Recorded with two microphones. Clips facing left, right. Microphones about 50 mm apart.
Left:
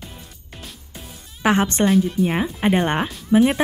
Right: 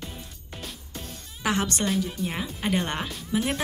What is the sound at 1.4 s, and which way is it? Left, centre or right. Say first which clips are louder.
Speech: left 8 dB; left.